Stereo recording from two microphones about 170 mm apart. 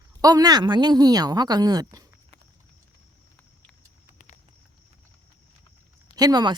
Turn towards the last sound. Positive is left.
turn(degrees=-25)  # may be behind; listen again after turning